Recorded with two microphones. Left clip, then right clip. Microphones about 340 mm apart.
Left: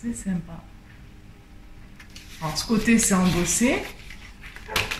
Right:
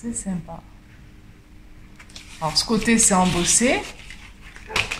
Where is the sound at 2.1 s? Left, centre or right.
Centre.